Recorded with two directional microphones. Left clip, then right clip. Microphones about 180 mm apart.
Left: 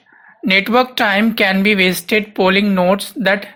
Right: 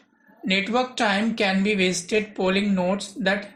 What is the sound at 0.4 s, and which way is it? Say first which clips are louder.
Speech: left 10 dB; 20° left (ahead or behind).